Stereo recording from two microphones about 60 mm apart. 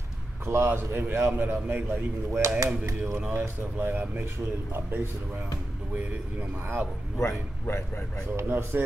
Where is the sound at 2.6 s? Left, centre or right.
Right.